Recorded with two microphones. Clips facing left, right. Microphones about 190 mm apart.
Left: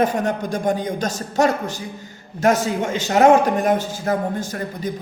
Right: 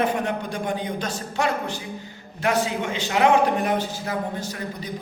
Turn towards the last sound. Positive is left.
turn(degrees=50)  # may be behind; listen again after turning